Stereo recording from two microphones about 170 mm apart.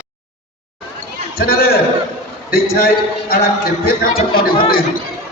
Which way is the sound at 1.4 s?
65° left (ahead or behind).